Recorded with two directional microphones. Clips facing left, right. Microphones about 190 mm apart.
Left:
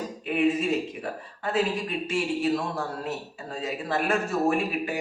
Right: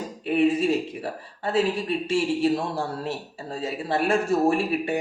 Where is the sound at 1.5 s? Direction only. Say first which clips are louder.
Right 3 dB; 30° right (ahead or behind).